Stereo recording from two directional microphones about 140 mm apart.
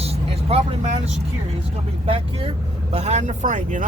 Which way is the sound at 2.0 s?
40° right (ahead or behind).